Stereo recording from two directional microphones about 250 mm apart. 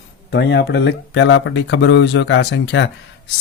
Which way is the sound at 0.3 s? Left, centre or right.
Left.